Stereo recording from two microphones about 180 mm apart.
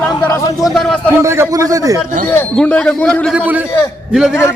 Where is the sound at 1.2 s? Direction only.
15° right (ahead or behind).